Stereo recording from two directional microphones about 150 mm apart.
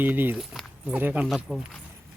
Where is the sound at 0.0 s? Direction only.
10° right (ahead or behind).